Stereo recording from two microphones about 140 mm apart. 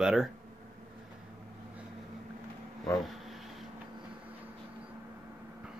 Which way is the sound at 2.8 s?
Centre (ahead or behind).